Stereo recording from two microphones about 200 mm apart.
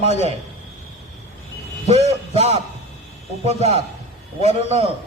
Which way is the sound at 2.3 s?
30° right (ahead or behind).